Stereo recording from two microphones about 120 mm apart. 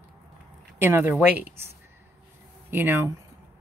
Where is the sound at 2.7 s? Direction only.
20° right (ahead or behind).